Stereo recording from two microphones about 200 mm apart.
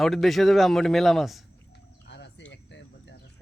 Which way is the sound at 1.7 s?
60° left (ahead or behind).